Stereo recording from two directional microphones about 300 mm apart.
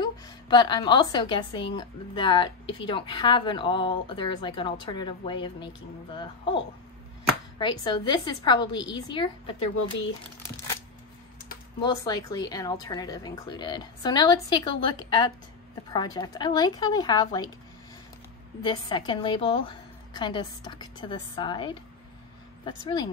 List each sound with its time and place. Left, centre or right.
0.0 s a woman's voice: centre
11.8 s speech: centre
18.6 s speech: centre